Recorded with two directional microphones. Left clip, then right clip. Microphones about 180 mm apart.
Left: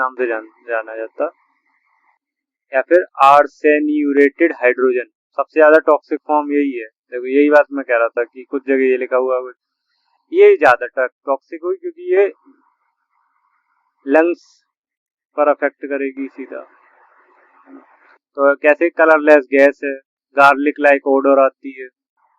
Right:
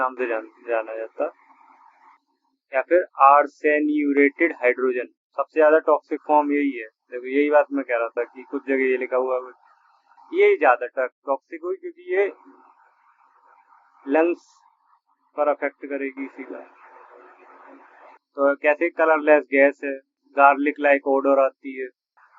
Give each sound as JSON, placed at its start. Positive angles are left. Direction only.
{"t": 0.2, "sound": "speech", "side_deg": 20}
{"t": 2.6, "sound": "speech", "side_deg": 30}
{"t": 14.0, "sound": "speech", "side_deg": 30}
{"t": 18.3, "sound": "speech", "side_deg": 30}